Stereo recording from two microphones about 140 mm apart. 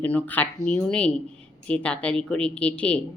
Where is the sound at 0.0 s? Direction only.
10° left (ahead or behind).